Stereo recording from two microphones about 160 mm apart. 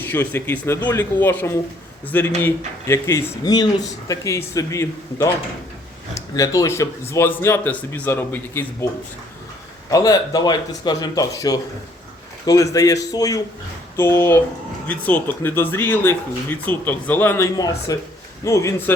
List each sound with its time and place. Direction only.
0.0 s speech: 10° left (ahead or behind)
9.9 s speech: 20° left (ahead or behind)